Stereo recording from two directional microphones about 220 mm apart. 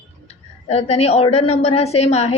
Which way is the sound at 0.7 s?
30° left (ahead or behind).